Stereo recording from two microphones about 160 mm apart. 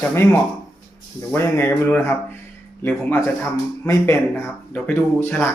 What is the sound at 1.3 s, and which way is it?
Speech, 15° left (ahead or behind).